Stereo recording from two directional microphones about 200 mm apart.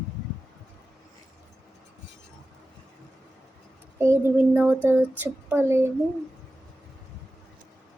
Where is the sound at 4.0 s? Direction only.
10° right (ahead or behind).